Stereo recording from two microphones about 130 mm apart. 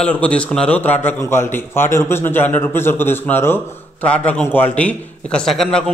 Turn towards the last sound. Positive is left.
turn(degrees=5)  # may be behind; listen again after turning